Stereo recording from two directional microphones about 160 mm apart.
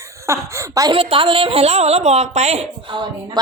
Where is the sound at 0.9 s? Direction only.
35° right (ahead or behind).